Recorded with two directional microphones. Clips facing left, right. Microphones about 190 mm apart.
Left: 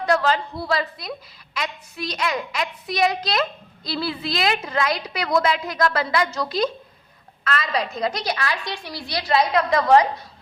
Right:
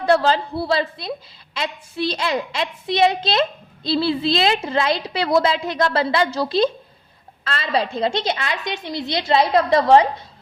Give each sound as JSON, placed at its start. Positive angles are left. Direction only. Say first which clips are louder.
{"t": 0.0, "sound": "a woman's voice", "louder": "right 3 dB", "side_deg": -30}